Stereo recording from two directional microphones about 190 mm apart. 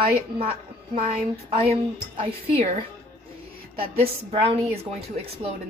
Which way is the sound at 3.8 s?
30° right (ahead or behind).